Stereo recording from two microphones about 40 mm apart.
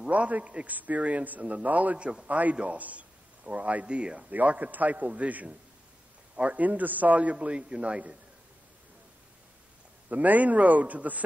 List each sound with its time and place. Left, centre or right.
0.1 s a man's voice: right
2.0 s speech: right
2.2 s a man's voice: right
4.5 s a man's voice: right
10.0 s a man's voice: right